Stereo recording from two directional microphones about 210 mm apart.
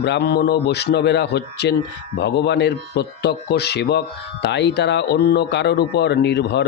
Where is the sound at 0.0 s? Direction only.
50° left (ahead or behind).